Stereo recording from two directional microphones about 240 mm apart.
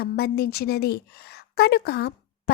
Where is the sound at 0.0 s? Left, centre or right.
Left.